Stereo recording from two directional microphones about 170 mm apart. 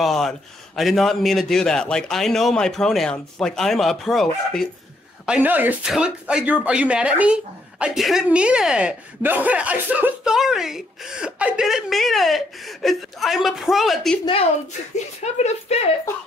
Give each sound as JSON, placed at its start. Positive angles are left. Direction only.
{"t": 0.0, "sound": "a woman's voice", "side_deg": 0}
{"t": 15.3, "sound": "speech", "side_deg": 40}